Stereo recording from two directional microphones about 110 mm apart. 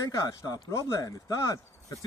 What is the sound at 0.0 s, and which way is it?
Speech, 30° left (ahead or behind).